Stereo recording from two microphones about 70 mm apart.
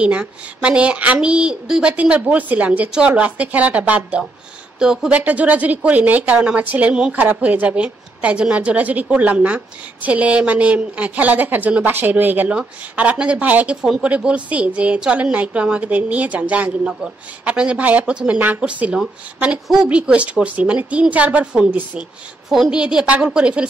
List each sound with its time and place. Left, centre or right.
0.0 s a woman's voice: centre
4.7 s a woman's voice: centre
5.2 s a woman's voice: right
22.5 s a woman's voice: centre